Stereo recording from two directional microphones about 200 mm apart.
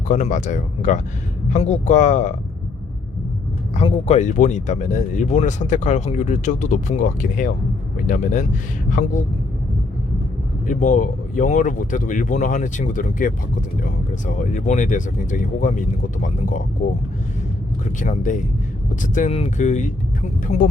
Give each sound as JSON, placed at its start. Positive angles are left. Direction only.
{"t": 0.1, "sound": "speech", "side_deg": 40}
{"t": 3.8, "sound": "speech", "side_deg": 30}
{"t": 10.7, "sound": "speech", "side_deg": 40}
{"t": 17.8, "sound": "speech", "side_deg": 40}